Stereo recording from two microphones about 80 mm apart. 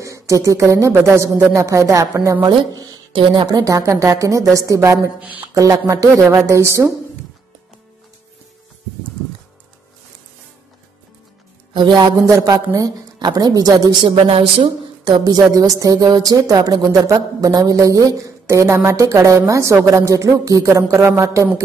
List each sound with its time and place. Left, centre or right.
0.0 s speech: right
3.1 s speech: right
3.4 s speech: right
3.8 s speech: right
5.2 s speech: centre
5.5 s speech: right
11.7 s speech: right
12.2 s speech: right
14.6 s speech: right
15.5 s speech: right
21.0 s speech: right